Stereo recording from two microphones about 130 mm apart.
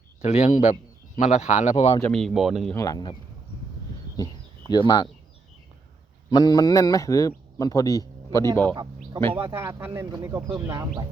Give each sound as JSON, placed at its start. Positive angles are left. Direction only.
{"t": 0.3, "sound": "a man's voice", "side_deg": 55}
{"t": 2.0, "sound": "speech", "side_deg": 10}
{"t": 2.7, "sound": "speech", "side_deg": 25}
{"t": 4.7, "sound": "speech", "side_deg": 35}
{"t": 6.3, "sound": "speech", "side_deg": 30}
{"t": 8.7, "sound": "speech", "side_deg": -35}
{"t": 9.4, "sound": "speech", "side_deg": -20}